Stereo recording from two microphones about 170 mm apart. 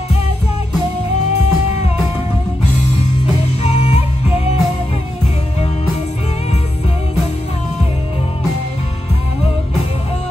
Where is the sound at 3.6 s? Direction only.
40° left (ahead or behind).